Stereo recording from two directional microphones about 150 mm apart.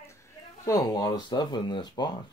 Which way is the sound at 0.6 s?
25° left (ahead or behind).